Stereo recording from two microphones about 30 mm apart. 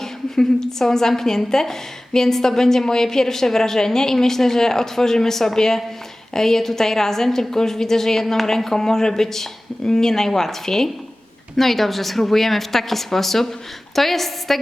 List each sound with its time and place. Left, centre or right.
0.0 s a woman's voice: centre